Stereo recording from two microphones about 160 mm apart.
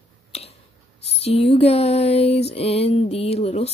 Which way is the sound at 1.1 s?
40° left (ahead or behind).